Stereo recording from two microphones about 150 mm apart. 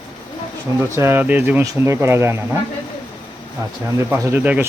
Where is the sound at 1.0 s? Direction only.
15° right (ahead or behind).